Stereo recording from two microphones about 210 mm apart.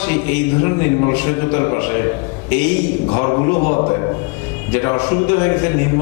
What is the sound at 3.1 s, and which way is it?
A man's voice, 25° left (ahead or behind).